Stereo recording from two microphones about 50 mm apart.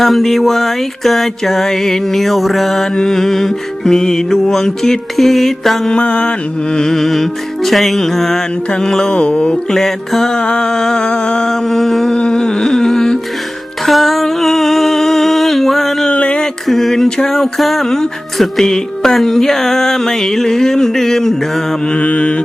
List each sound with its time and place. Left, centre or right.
0.0 s music: centre
5.9 s music: centre
8.7 s mantra: centre
9.6 s music: centre
13.8 s a sound: centre
16.0 s a sound: left
16.6 s music: centre
21.9 s mantra: left